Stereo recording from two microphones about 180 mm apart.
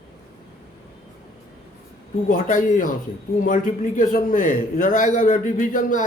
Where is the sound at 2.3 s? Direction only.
50° left (ahead or behind).